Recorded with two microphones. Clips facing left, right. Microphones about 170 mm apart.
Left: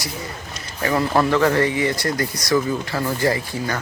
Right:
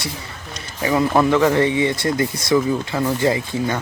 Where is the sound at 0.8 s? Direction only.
10° right (ahead or behind).